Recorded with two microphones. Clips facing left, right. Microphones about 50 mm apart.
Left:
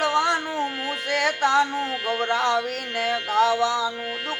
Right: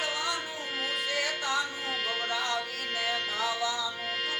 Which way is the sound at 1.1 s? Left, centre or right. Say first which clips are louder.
Left 13 dB; left.